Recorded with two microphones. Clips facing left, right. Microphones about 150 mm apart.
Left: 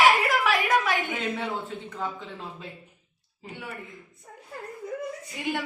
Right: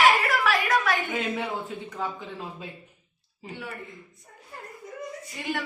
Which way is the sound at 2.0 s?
10° right (ahead or behind).